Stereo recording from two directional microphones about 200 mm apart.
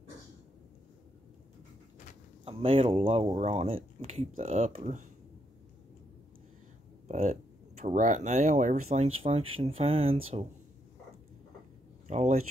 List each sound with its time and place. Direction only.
2.4 s speech: 30° right (ahead or behind)
7.1 s speech: 35° right (ahead or behind)
12.1 s speech: 35° right (ahead or behind)